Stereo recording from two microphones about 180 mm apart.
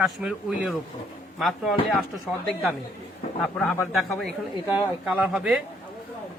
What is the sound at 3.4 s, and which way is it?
Speech, 5° left (ahead or behind).